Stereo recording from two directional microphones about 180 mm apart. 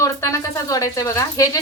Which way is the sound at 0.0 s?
15° left (ahead or behind).